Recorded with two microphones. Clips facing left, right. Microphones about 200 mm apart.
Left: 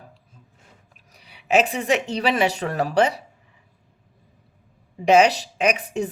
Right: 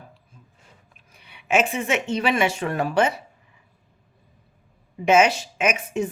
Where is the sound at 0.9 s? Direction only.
35° left (ahead or behind).